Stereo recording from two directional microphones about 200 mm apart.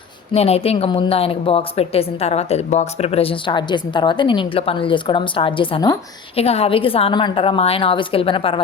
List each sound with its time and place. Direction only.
0.3 s a woman's voice: 30° left (ahead or behind)